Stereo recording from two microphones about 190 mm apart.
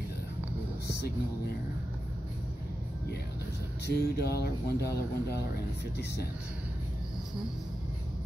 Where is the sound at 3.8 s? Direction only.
55° left (ahead or behind).